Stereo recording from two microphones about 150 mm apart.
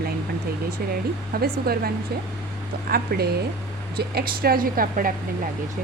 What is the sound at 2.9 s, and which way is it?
A woman's voice, 85° right.